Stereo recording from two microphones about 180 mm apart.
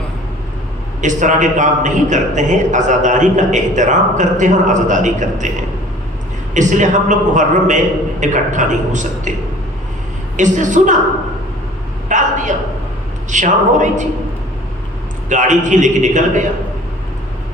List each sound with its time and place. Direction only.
1.0 s a man's voice: 45° right (ahead or behind)
10.3 s a man's voice: 45° right (ahead or behind)
12.0 s a sound: 45° right (ahead or behind)
13.3 s a man's voice: 45° right (ahead or behind)
15.3 s a man's voice: 45° right (ahead or behind)